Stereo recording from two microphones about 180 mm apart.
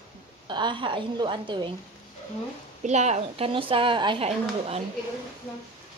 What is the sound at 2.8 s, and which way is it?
Speech, 40° right (ahead or behind).